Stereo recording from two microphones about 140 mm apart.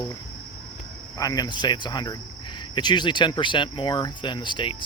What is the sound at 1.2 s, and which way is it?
Speech, 25° left (ahead or behind).